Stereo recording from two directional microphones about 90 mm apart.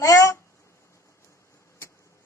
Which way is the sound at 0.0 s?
35° left (ahead or behind).